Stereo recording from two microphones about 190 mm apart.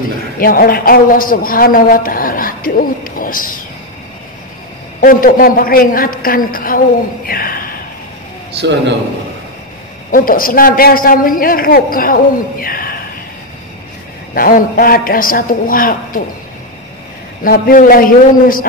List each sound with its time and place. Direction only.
0.4 s a woman's voice: 50° left (ahead or behind)
5.0 s a woman's voice: 50° left (ahead or behind)
7.2 s a sound: 50° left (ahead or behind)
8.5 s a man's voice: 65° right (ahead or behind)
10.1 s a woman's voice: 45° left (ahead or behind)
14.3 s a woman's voice: 50° left (ahead or behind)
17.4 s a woman's voice: 50° left (ahead or behind)